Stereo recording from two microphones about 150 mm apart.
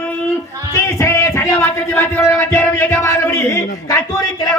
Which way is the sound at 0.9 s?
20° left (ahead or behind).